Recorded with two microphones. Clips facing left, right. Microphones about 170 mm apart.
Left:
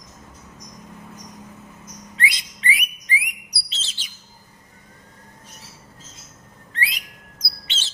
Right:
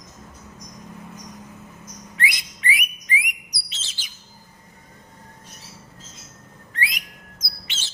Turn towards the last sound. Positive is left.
turn(degrees=30)  # may be behind; listen again after turning